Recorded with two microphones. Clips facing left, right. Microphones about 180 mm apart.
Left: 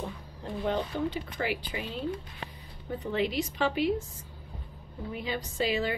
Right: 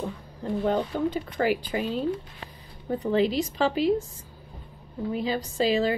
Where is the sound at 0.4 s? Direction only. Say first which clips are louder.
Right 5 dB; 45° right (ahead or behind).